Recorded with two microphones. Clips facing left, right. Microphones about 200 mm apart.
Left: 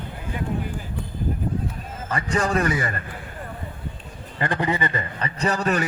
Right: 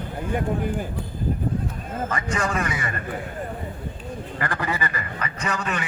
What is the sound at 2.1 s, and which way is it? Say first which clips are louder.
Speech: left 5 dB; 35° left (ahead or behind).